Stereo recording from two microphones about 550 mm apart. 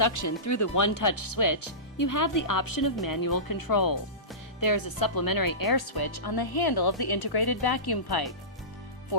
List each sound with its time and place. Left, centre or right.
0.0 s speech: left